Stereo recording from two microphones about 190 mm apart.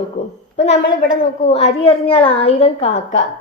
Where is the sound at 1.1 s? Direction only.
35° left (ahead or behind).